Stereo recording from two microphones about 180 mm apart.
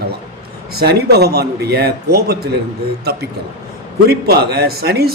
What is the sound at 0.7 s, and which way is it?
Speech, 60° right (ahead or behind).